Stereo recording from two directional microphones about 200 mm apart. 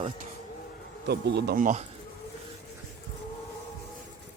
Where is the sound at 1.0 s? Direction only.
55° right (ahead or behind); by 1.9 s 40° right (ahead or behind).